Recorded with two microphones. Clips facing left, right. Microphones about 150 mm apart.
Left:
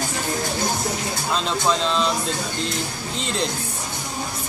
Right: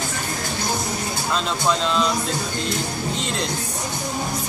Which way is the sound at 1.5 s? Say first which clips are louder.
Left 1 dB; centre (ahead or behind).